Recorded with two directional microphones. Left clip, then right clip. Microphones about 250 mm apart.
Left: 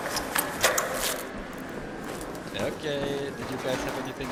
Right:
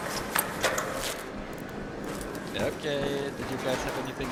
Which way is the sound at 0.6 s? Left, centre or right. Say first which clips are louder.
Left 3 dB; left.